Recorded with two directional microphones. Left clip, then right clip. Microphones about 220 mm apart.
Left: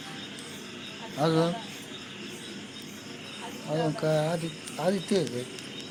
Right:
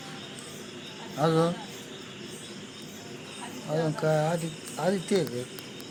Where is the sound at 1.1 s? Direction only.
15° right (ahead or behind).